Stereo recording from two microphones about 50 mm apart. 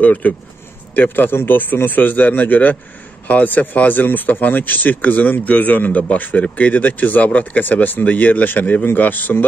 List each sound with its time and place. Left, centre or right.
0.0 s speech: left